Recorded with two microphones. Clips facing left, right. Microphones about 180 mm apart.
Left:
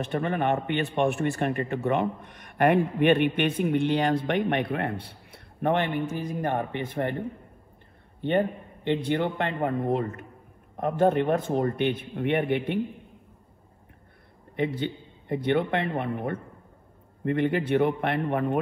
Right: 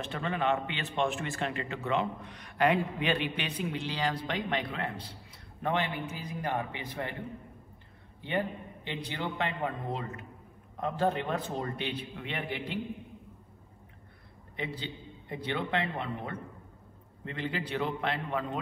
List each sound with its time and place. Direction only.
0.1 s a man's voice: 60° left (ahead or behind)
14.6 s a man's voice: 55° left (ahead or behind)